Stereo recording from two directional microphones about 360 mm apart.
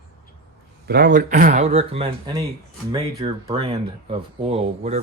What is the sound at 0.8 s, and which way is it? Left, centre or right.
Speech, right.